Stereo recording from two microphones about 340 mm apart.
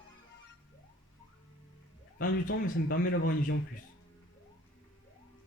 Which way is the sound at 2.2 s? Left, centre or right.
Left.